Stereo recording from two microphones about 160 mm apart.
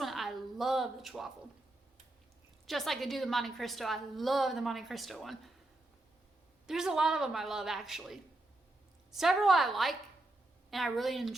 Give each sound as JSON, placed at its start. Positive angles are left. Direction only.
{"t": 0.0, "sound": "a sound", "side_deg": 0}
{"t": 2.6, "sound": "a woman's voice", "side_deg": 0}
{"t": 6.7, "sound": "a woman's voice", "side_deg": -5}